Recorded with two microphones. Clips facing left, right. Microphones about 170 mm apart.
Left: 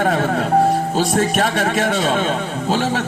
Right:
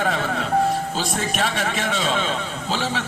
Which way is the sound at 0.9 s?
45° left (ahead or behind).